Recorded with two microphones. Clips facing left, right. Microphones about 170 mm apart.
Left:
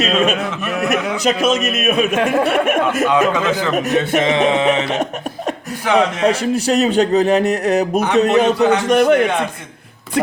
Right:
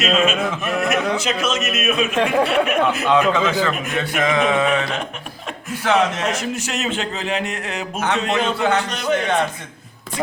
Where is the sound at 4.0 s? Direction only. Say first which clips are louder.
Even; 25° left (ahead or behind).